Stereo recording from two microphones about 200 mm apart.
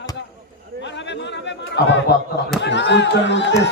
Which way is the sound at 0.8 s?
60° left (ahead or behind).